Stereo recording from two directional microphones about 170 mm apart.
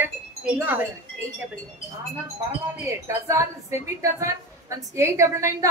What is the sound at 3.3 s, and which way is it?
Speech, 15° right (ahead or behind).